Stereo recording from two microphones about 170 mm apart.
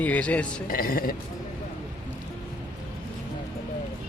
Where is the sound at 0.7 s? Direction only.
60° left (ahead or behind).